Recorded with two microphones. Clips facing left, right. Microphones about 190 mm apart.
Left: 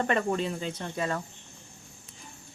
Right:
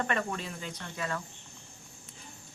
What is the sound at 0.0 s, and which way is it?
Speech, 30° left (ahead or behind).